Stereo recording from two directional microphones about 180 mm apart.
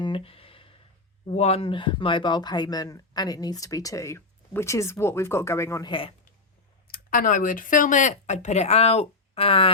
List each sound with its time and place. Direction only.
0.0 s a sound: 30° left (ahead or behind)
1.3 s speech: 35° left (ahead or behind); by 5.9 s 15° left (ahead or behind)
5.9 s speech: 30° left (ahead or behind)
6.8 s speech: 50° left (ahead or behind); by 9.7 s 30° left (ahead or behind)